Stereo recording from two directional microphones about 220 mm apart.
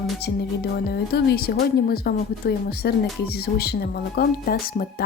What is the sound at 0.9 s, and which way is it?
A woman's voice, 45° left (ahead or behind).